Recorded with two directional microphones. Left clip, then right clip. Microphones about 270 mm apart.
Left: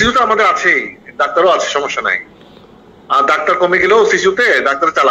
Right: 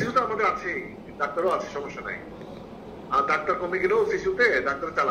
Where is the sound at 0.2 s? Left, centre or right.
Left.